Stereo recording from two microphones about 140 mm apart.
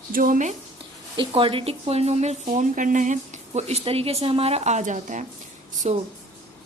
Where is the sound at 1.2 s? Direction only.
40° right (ahead or behind); by 5.2 s 65° right (ahead or behind).